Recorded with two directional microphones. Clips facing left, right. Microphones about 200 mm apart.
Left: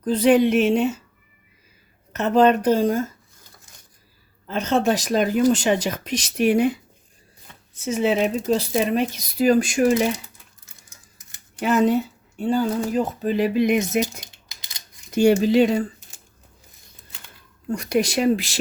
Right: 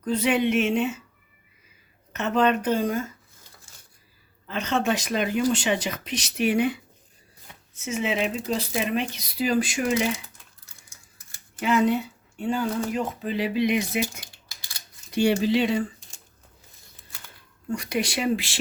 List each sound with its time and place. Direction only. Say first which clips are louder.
0.0 s speech: left 6 dB; 35° left (ahead or behind)
2.1 s speech: left 6 dB; 35° left (ahead or behind)
4.4 s speech: left 5 dB; 40° left (ahead or behind)
7.5 s shuffling cards: even; 10° right (ahead or behind)
7.9 s speech: left 6 dB; 35° left (ahead or behind)
11.6 s speech: left 3 dB; 40° left (ahead or behind)
14.3 s a sound: left 1 dB; 20° left (ahead or behind)
15.1 s speech: left 5 dB; 45° left (ahead or behind)
17.7 s speech: left 6 dB; 40° left (ahead or behind)